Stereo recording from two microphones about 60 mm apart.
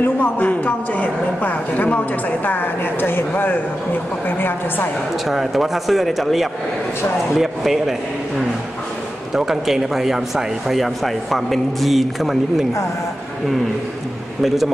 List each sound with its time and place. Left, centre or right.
0.0 s speech: left
0.5 s a woman's voice: left
5.2 s speech: centre
9.3 s speech: centre
14.4 s speech: centre